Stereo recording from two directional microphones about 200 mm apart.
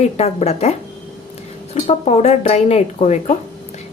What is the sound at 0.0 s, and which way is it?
A woman's voice, 35° left (ahead or behind).